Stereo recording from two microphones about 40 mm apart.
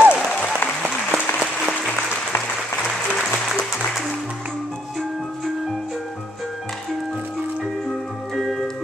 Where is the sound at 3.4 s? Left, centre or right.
Centre.